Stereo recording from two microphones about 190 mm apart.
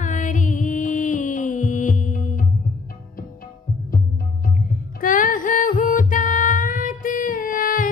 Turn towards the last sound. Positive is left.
turn(degrees=45)  # may be behind; listen again after turning